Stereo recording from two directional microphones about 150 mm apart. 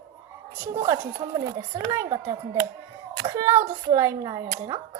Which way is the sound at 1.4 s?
20° right (ahead or behind).